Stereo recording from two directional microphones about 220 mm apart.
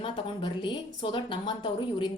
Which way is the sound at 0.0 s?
25° left (ahead or behind).